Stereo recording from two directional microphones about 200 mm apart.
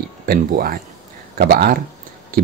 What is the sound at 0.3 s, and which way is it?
Speech, 45° right (ahead or behind).